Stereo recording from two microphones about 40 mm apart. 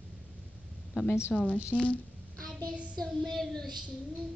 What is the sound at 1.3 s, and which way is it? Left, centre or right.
Speech, centre.